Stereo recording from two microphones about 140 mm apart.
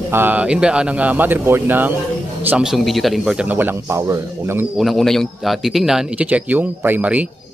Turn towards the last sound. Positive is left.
turn(degrees=-10)  # may be behind; listen again after turning